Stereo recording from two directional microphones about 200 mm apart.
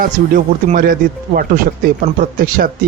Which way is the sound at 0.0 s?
40° right (ahead or behind).